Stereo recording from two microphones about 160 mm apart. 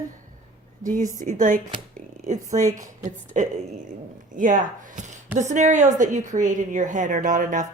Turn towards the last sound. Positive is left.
turn(degrees=-50)  # may be behind; listen again after turning